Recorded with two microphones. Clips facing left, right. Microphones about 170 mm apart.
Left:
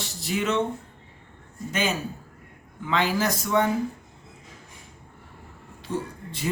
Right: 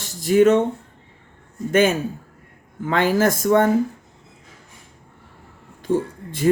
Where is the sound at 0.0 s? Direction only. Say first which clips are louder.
Right 13 dB; 45° right (ahead or behind).